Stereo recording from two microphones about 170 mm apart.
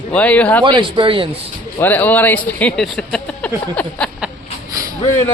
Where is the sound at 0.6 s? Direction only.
30° right (ahead or behind).